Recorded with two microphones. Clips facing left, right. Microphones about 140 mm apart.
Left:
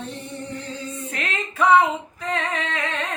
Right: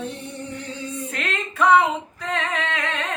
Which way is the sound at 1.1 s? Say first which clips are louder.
Left 1 dB; centre (ahead or behind).